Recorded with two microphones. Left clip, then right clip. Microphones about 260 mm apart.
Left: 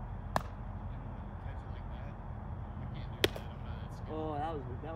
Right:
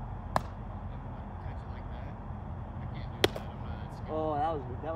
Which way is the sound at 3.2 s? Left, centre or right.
Centre.